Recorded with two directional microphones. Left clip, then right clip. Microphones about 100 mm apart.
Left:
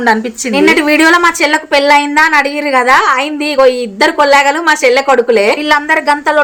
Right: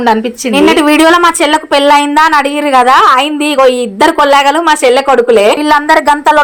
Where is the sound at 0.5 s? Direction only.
35° right (ahead or behind).